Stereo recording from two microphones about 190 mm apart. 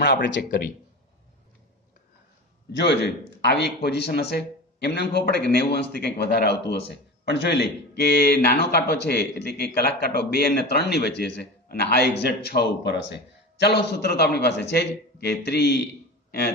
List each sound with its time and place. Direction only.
0.0 s a man's voice: 65° left (ahead or behind)
2.7 s a man's voice: 60° left (ahead or behind)